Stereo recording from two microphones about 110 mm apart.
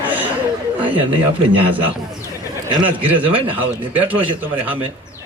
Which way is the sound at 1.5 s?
15° right (ahead or behind).